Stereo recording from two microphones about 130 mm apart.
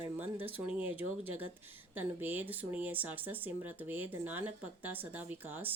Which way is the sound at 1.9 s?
15° right (ahead or behind).